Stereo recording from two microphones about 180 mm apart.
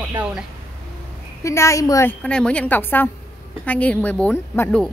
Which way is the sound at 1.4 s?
15° left (ahead or behind).